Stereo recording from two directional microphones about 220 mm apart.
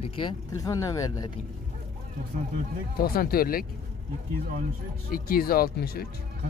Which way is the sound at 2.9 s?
45° left (ahead or behind).